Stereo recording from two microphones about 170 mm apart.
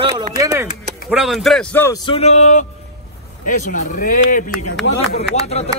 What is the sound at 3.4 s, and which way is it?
Speech, 50° left (ahead or behind).